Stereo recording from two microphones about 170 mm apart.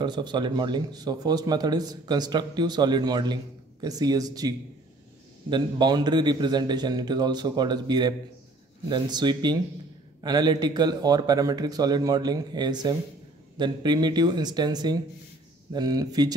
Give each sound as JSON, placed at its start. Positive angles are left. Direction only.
{"t": 0.0, "sound": "speech", "side_deg": -25}